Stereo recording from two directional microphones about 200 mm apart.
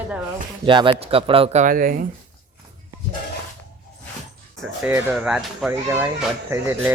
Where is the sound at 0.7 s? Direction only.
25° right (ahead or behind); by 1.9 s 45° right (ahead or behind).